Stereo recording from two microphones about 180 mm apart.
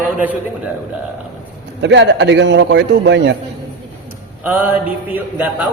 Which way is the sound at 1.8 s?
80° right.